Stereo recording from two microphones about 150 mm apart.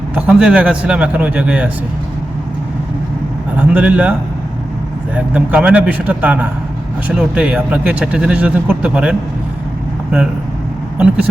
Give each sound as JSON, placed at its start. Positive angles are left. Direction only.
{"t": 0.1, "sound": "speech", "side_deg": -10}
{"t": 3.6, "sound": "speech", "side_deg": -10}
{"t": 5.1, "sound": "speech", "side_deg": -10}
{"t": 10.9, "sound": "speech", "side_deg": -10}